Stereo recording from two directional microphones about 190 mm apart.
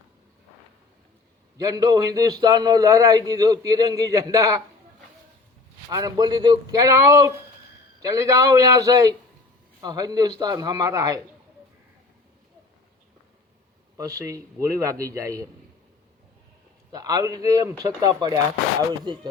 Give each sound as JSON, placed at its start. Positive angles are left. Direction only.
{"t": 1.5, "sound": "a man's voice", "side_deg": -20}
{"t": 5.9, "sound": "a man's voice", "side_deg": -20}
{"t": 13.9, "sound": "a man's voice", "side_deg": -15}
{"t": 16.9, "sound": "a man's voice", "side_deg": -20}